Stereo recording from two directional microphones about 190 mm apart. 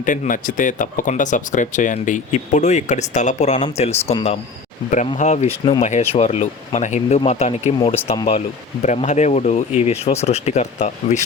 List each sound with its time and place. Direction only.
0.0 s speech: 45° left (ahead or behind)